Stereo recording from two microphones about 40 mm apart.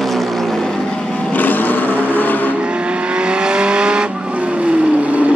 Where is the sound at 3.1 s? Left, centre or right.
Right.